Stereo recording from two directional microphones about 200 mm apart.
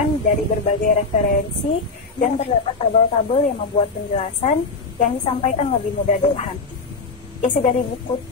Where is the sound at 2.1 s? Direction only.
35° left (ahead or behind).